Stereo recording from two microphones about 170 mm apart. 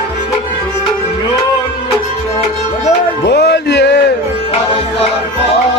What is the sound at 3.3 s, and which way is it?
Music, 70° left (ahead or behind).